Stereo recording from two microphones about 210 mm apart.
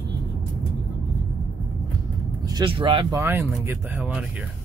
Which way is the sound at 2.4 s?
20° right (ahead or behind).